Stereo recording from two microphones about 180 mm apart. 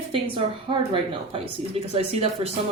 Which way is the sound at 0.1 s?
30° right (ahead or behind).